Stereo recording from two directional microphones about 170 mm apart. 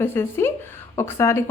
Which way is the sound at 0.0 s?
15° left (ahead or behind).